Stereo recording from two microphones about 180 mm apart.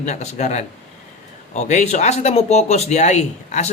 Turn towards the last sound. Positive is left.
turn(degrees=40)  # may be behind; listen again after turning